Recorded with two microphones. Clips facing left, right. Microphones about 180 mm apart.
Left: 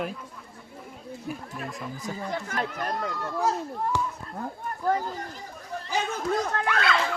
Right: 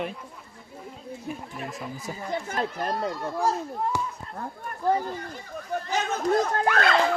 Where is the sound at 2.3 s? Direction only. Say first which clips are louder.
Right 4 dB; 25° right (ahead or behind).